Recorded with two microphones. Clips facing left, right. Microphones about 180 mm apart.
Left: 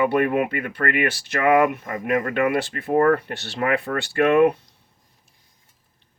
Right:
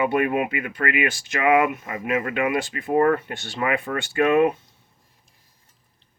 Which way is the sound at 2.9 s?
60° left (ahead or behind).